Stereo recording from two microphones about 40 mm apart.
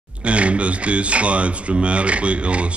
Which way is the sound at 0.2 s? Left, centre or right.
Right.